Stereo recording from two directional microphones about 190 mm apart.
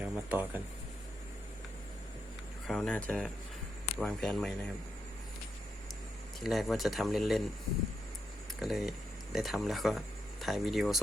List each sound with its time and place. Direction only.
0.0 s speech: 10° right (ahead or behind)
2.6 s speech: 5° left (ahead or behind)
6.4 s speech: centre (ahead or behind)
8.5 s speech: centre (ahead or behind)